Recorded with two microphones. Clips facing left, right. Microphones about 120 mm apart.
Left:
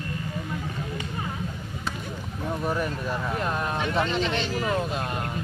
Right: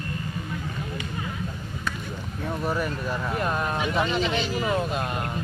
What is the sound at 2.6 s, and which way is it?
Speech, centre (ahead or behind).